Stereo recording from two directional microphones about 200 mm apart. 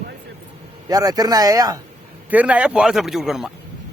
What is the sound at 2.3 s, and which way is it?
Speech, 5° right (ahead or behind).